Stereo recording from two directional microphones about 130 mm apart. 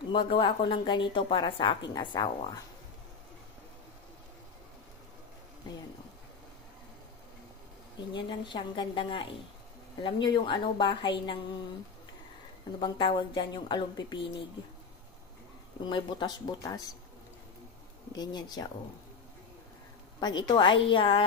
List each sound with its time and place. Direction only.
0.1 s a woman's voice: 40° left (ahead or behind)
8.1 s a woman's voice: 35° left (ahead or behind)
12.8 s a woman's voice: 35° left (ahead or behind)
15.9 s speech: 35° left (ahead or behind)
18.1 s a woman's voice: 30° left (ahead or behind)
20.2 s a woman's voice: 30° left (ahead or behind)